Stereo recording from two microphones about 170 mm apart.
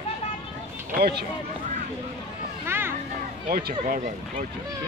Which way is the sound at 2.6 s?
15° right (ahead or behind).